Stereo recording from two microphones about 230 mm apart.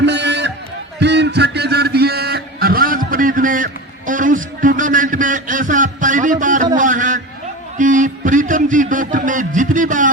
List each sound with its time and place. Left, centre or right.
0.0 s music: right
0.9 s a sound: right
6.7 s a man's voice: right